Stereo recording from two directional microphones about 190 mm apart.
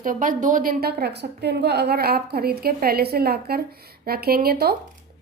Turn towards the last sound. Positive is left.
turn(degrees=-55)  # may be behind; listen again after turning